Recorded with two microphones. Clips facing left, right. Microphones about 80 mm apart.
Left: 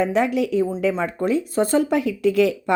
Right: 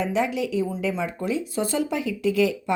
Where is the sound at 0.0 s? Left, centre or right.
Left.